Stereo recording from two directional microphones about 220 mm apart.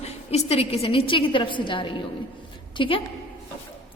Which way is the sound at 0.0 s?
30° left (ahead or behind).